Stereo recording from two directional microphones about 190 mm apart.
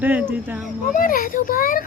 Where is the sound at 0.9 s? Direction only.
45° left (ahead or behind).